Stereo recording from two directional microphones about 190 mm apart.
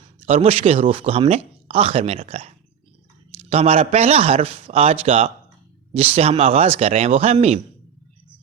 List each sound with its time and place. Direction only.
0.3 s speech: 30° right (ahead or behind)
3.5 s speech: 30° right (ahead or behind)